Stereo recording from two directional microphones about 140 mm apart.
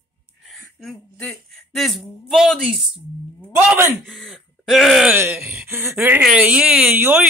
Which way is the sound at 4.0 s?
Centre (ahead or behind).